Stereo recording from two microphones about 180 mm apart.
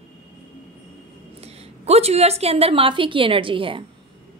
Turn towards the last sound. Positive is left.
turn(degrees=-30)  # may be behind; listen again after turning